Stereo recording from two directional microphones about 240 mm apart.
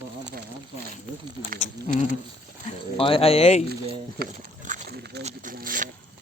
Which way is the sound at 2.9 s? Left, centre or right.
Left.